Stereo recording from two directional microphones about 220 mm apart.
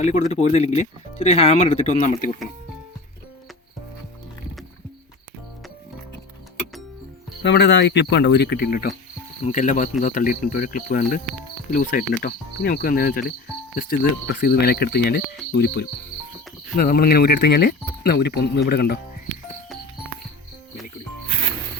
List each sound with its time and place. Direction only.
0.0 s speech: 30° left (ahead or behind)
7.4 s speech: 50° left (ahead or behind)